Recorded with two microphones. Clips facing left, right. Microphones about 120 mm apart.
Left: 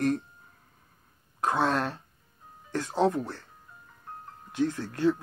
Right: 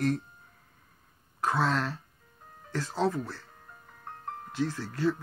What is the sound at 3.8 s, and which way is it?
Music, 65° right (ahead or behind).